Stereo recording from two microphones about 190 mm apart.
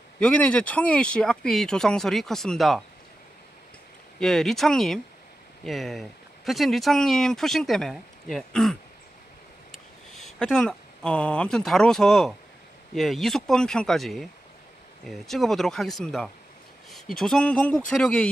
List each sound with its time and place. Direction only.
0.2 s speech: 5° left (ahead or behind)
4.2 s speech: centre (ahead or behind)